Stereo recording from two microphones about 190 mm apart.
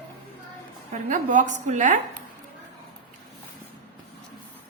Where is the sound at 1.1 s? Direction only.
40° right (ahead or behind).